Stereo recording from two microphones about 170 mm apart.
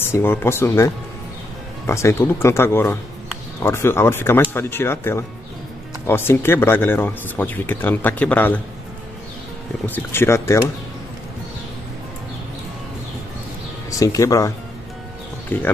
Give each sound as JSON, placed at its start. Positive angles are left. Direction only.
{"t": 0.0, "sound": "speech", "side_deg": 15}
{"t": 9.8, "sound": "speech", "side_deg": 10}
{"t": 13.8, "sound": "speech", "side_deg": 20}
{"t": 15.5, "sound": "speech", "side_deg": 10}